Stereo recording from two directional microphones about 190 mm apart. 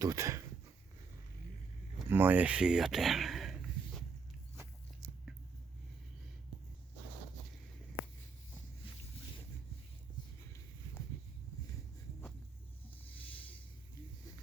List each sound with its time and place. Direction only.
0.0 s speech: 15° right (ahead or behind)
2.0 s speech: 10° right (ahead or behind)